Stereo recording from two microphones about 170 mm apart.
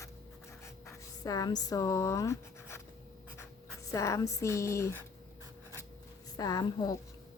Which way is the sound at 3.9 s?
20° left (ahead or behind).